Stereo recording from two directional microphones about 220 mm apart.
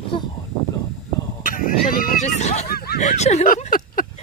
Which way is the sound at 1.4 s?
40° left (ahead or behind).